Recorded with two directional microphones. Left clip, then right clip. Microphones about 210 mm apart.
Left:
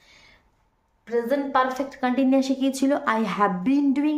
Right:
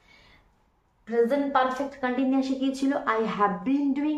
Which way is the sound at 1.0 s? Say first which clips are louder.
Even; 45° left (ahead or behind).